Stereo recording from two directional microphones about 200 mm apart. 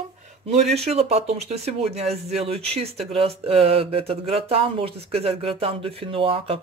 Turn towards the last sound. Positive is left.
turn(degrees=-25)  # may be behind; listen again after turning